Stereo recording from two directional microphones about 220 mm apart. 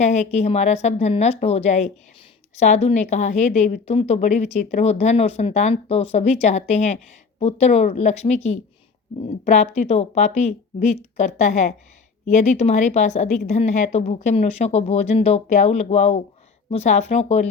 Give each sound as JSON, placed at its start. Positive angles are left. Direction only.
{"t": 0.0, "sound": "a woman's voice", "side_deg": 30}